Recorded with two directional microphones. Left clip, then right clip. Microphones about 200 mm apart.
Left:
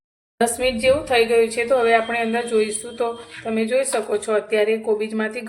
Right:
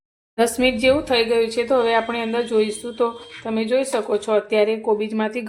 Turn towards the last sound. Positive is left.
turn(degrees=-25)  # may be behind; listen again after turning